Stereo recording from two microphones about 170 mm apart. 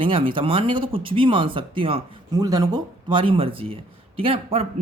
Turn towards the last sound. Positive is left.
turn(degrees=-35)  # may be behind; listen again after turning